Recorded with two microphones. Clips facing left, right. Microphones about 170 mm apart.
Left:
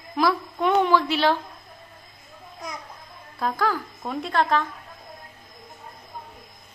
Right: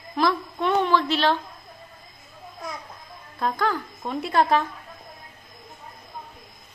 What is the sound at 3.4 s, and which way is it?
Speech, 5° left (ahead or behind).